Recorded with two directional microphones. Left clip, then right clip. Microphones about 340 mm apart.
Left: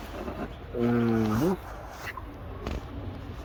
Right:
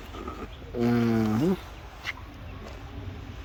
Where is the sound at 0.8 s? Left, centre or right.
Centre.